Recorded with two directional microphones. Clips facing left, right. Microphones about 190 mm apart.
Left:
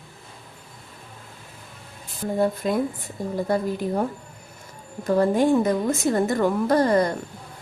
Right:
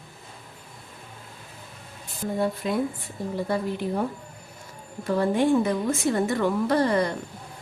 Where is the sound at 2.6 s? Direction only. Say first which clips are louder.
Left 2 dB; 45° left (ahead or behind).